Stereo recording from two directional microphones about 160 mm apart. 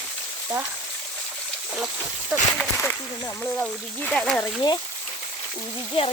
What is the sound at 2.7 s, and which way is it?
Speech, 10° left (ahead or behind).